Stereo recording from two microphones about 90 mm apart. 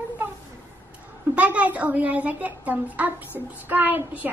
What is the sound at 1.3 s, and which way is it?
A child's voice, 15° right (ahead or behind).